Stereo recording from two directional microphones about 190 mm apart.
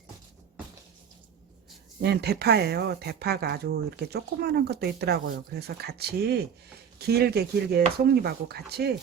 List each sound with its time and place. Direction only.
2.0 s speech: 60° right (ahead or behind)